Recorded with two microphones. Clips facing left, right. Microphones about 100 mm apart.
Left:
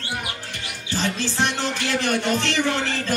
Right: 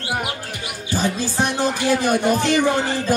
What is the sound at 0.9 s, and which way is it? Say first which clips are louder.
Speech: right 3 dB; 10° right (ahead or behind).